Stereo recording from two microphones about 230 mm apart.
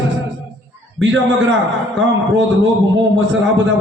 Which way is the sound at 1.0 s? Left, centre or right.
Right.